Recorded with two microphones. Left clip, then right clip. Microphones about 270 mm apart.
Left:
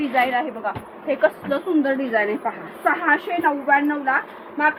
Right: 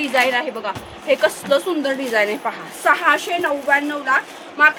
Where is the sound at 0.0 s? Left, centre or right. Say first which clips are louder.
Right 2 dB; right.